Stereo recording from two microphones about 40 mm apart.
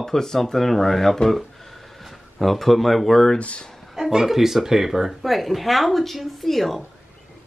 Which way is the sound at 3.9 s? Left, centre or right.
Centre.